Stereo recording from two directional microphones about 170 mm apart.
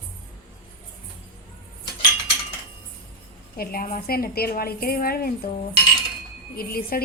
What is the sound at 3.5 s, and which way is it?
A woman's voice, 60° left (ahead or behind).